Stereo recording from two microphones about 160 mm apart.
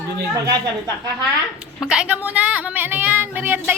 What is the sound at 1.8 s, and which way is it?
Speech, 5° right (ahead or behind).